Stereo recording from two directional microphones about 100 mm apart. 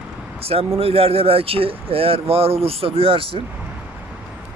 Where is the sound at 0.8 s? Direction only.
75° right (ahead or behind).